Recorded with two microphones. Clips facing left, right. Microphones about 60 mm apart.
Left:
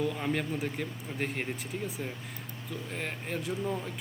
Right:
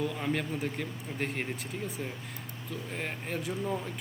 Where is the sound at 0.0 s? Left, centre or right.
Centre.